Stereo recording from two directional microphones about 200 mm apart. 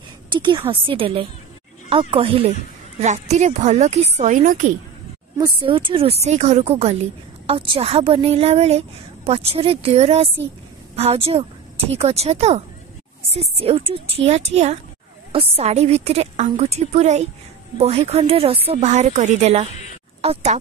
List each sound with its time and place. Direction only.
0.3 s a woman's voice: 25° right (ahead or behind); by 4.7 s 40° right (ahead or behind)
5.4 s a woman's voice: 25° right (ahead or behind)